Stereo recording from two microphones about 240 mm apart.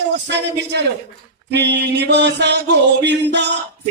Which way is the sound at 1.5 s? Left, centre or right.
Right.